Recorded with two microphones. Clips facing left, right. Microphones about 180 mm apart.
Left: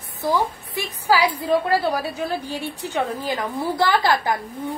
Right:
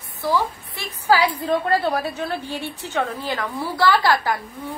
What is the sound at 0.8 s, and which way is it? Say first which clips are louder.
A woman's voice: right 1 dB; 10° left (ahead or behind).